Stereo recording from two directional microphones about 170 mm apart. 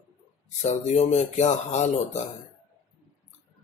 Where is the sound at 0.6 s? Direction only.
40° left (ahead or behind).